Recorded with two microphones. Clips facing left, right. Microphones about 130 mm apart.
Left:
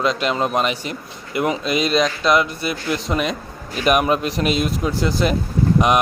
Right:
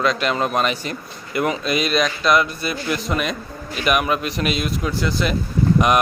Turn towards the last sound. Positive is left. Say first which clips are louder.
# even
turn(degrees=20)  # may be behind; listen again after turning